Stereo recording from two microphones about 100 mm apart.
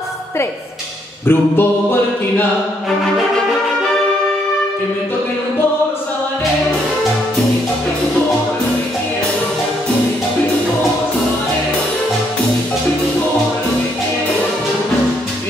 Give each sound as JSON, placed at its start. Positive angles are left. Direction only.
{"t": 1.2, "sound": "mantra", "side_deg": 20}